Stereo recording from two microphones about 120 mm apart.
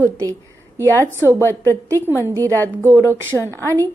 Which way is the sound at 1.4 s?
20° left (ahead or behind).